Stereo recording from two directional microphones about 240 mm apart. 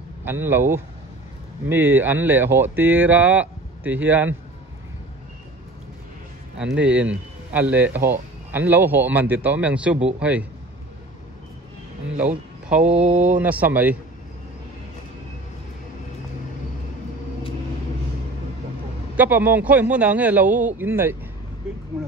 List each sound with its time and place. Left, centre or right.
0.2 s speech: centre
6.6 s speech: centre
12.2 s speech: centre
12.8 s speech: right
13.4 s speech: centre
19.1 s speech: centre